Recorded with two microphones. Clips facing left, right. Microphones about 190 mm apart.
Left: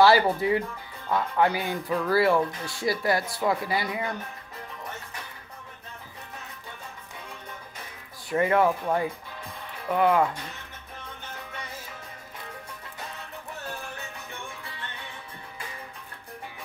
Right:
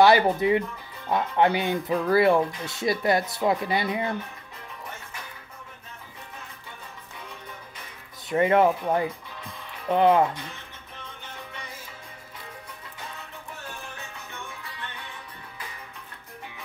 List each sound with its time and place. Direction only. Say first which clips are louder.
0.0 s speech: right 1 dB; 20° right (ahead or behind)
8.3 s speech: right 2 dB; 20° right (ahead or behind)